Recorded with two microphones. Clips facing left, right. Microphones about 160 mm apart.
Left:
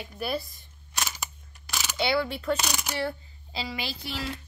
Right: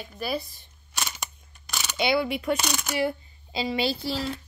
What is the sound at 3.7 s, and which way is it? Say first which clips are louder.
Speech: right 9 dB; 30° right (ahead or behind).